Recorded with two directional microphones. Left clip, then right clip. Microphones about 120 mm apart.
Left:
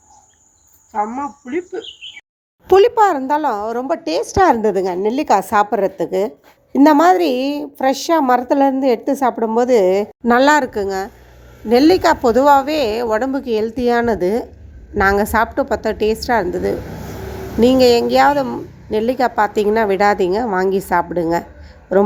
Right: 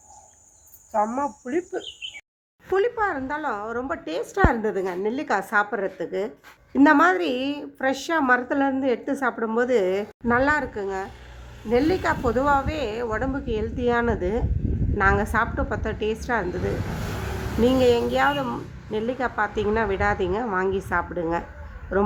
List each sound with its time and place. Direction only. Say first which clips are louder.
0.9 s speech: left 3 dB; 25° right (ahead or behind)
2.6 s a woman's voice: left 12 dB; 45° left (ahead or behind)
10.2 s a woman's voice: left 9 dB; 50° left (ahead or behind)